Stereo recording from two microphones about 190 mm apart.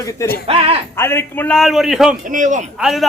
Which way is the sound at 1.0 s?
15° left (ahead or behind).